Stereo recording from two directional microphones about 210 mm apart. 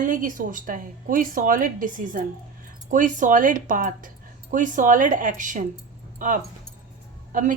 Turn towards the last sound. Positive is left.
turn(degrees=-40)  # may be behind; listen again after turning